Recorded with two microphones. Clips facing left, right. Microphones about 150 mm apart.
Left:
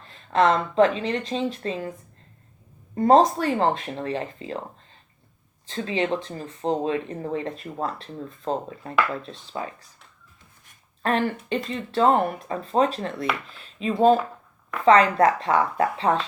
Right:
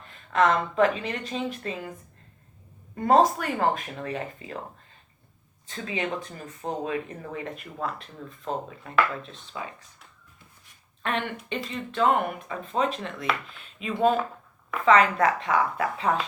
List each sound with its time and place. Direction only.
0.0 s speech: 35° left (ahead or behind)
2.9 s speech: 35° left (ahead or behind)
5.6 s speech: 30° left (ahead or behind)
11.0 s speech: 35° left (ahead or behind)